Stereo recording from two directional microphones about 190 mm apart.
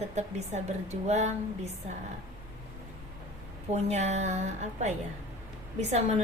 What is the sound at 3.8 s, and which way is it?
A woman's voice, 35° right (ahead or behind).